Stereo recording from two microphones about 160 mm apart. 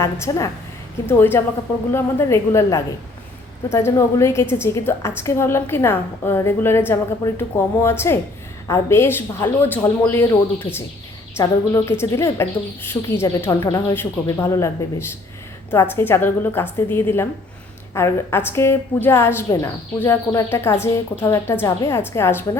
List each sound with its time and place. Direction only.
0.0 s a woman's voice: 20° left (ahead or behind)